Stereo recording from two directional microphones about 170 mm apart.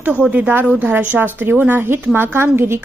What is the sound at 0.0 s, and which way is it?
Speech, 10° right (ahead or behind).